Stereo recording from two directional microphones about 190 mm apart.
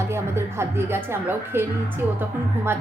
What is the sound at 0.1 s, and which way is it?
Speech, 15° right (ahead or behind).